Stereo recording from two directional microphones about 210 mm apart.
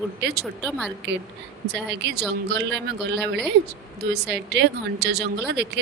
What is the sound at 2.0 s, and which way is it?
Speech, 50° right (ahead or behind).